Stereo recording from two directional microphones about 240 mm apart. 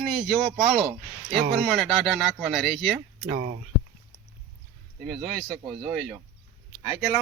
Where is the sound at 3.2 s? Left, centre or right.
Right.